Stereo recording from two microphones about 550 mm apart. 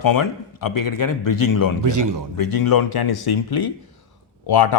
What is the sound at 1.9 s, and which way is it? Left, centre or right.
Speech, right.